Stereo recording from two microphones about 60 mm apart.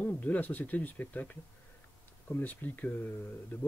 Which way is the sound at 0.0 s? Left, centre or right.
Left.